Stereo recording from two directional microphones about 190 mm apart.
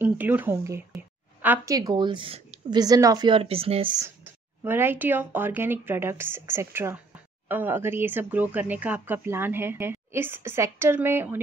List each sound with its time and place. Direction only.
0.0 s speech: 10° right (ahead or behind)
0.9 s a sound: 10° right (ahead or behind)
1.8 s a woman's voice: 20° right (ahead or behind)
2.8 s speech: 20° right (ahead or behind)
4.0 s speech: 10° right (ahead or behind)